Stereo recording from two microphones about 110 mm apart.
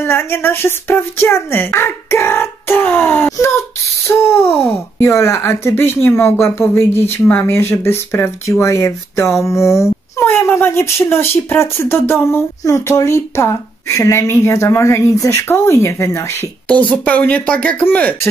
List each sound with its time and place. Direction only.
0.0 s speech: 20° left (ahead or behind)
16.9 s speech: 15° left (ahead or behind)